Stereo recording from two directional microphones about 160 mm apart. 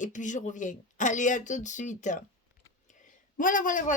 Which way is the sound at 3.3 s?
55° left (ahead or behind).